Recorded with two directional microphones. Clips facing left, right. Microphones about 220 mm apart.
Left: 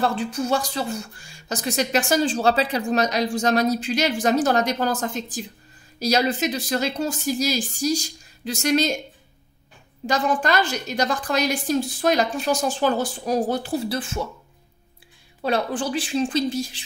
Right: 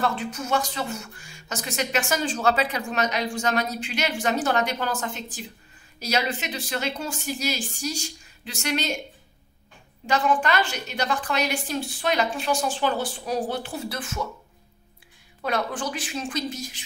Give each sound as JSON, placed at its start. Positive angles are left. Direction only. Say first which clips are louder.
{"t": 0.0, "sound": "speech", "louder": "left 4 dB", "side_deg": 35}
{"t": 10.0, "sound": "speech", "louder": "left 1 dB", "side_deg": 40}
{"t": 15.4, "sound": "speech", "louder": "left 4 dB", "side_deg": 30}